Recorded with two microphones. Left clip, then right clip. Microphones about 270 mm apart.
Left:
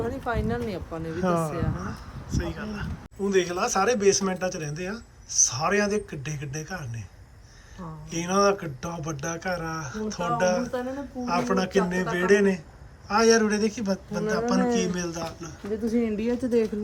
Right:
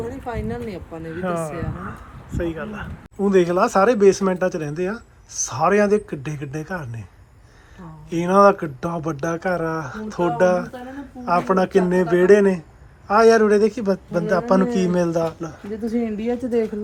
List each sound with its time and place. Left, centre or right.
0.0 s speech: centre
1.5 s speech: centre
8.1 s speech: centre
16.2 s speech: centre